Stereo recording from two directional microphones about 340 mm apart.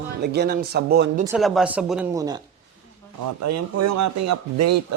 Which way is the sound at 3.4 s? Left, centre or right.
Right.